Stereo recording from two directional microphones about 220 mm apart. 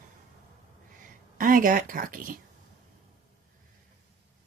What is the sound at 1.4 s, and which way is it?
Speech, 40° right (ahead or behind).